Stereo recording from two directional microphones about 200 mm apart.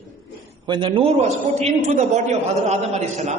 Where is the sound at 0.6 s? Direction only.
25° right (ahead or behind).